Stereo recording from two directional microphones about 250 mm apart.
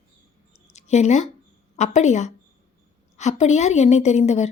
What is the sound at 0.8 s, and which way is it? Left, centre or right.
Speech, left.